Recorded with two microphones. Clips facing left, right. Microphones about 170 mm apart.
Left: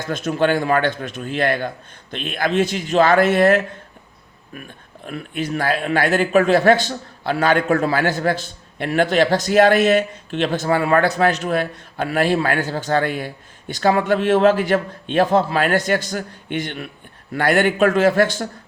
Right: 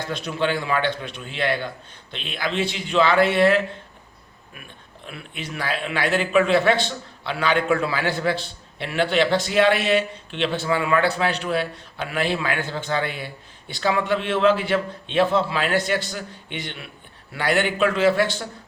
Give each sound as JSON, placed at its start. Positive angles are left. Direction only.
{"t": 0.1, "sound": "a man's voice", "side_deg": 45}
{"t": 5.0, "sound": "a man's voice", "side_deg": 45}